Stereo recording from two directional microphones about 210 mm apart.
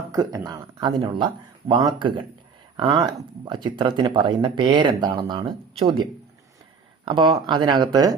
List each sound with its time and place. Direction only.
0.1 s speech: 15° right (ahead or behind)